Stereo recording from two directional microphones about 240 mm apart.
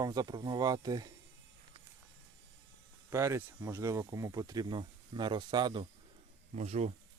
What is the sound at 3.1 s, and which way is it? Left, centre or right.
Speech, centre.